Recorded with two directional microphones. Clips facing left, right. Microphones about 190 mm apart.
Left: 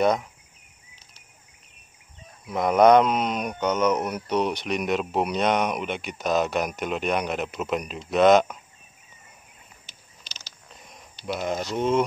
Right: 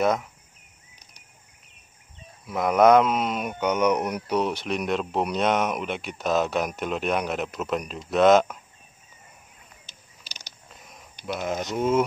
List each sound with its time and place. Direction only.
0.0 s speech: centre (ahead or behind)
2.4 s speech: centre (ahead or behind)
10.2 s mechanisms: 10° right (ahead or behind)
10.7 s a sound: centre (ahead or behind)
11.3 s speech: centre (ahead or behind)